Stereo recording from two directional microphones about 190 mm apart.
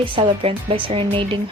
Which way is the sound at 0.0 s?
30° right (ahead or behind).